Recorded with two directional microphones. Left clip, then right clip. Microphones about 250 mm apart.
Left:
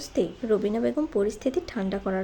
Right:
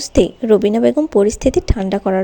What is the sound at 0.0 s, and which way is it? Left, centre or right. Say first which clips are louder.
A woman's voice: right 13 dB; right.